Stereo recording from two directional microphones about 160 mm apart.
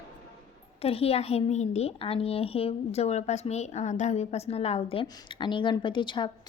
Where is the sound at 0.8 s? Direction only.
40° left (ahead or behind).